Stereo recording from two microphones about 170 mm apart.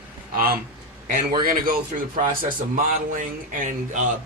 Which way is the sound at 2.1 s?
50° right (ahead or behind).